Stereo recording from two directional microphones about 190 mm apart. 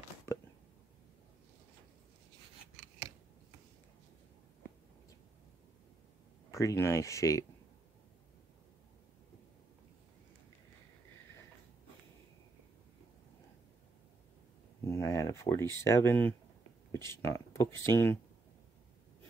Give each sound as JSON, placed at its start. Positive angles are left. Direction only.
{"t": 6.5, "sound": "speech", "side_deg": 15}
{"t": 14.9, "sound": "a sound", "side_deg": 15}
{"t": 16.9, "sound": "speech", "side_deg": 15}